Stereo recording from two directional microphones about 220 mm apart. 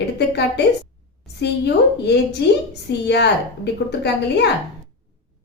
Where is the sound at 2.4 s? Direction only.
50° left (ahead or behind).